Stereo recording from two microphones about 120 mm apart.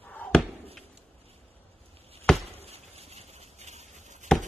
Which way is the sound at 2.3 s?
60° right (ahead or behind).